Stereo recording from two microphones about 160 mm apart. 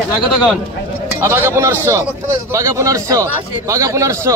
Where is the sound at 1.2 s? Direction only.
15° right (ahead or behind).